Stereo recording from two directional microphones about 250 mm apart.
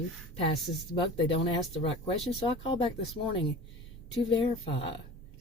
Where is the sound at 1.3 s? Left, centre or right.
Left.